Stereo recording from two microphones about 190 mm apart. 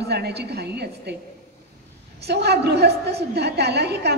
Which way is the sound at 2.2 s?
60° right (ahead or behind).